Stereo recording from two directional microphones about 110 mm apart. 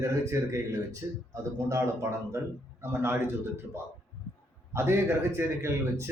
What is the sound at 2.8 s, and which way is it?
A man's voice, 25° right (ahead or behind).